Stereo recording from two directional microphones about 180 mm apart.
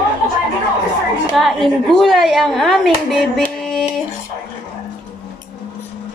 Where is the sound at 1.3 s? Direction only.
Centre (ahead or behind).